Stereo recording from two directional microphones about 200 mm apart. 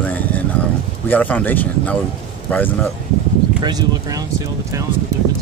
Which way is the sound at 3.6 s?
20° right (ahead or behind).